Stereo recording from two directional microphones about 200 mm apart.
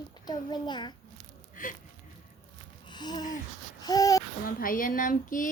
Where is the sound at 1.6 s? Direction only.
45° left (ahead or behind).